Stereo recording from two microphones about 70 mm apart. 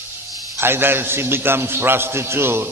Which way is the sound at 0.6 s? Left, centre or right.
Right.